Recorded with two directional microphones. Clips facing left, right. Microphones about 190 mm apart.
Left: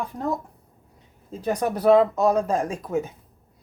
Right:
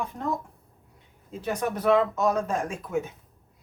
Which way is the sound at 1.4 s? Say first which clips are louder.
Left 5 dB; 35° left (ahead or behind).